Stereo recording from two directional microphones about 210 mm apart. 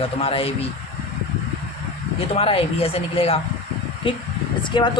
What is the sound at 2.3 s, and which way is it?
A woman's voice, 25° left (ahead or behind).